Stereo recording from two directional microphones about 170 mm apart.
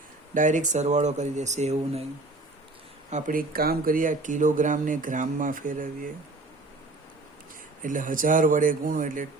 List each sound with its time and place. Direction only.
0.3 s speech: 50° right (ahead or behind)
3.1 s speech: 50° right (ahead or behind)
7.8 s speech: 50° right (ahead or behind)